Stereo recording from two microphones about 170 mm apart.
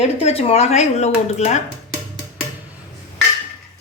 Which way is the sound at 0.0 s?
35° left (ahead or behind).